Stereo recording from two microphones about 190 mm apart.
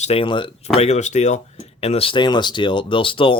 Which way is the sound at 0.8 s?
35° left (ahead or behind).